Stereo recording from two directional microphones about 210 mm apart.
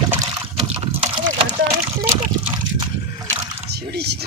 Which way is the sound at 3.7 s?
50° right (ahead or behind).